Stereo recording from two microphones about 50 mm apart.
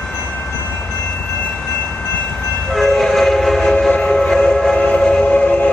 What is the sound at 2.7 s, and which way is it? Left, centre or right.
Train, centre.